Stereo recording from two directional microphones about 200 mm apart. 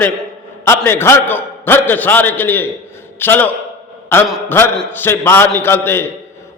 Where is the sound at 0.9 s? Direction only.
10° left (ahead or behind).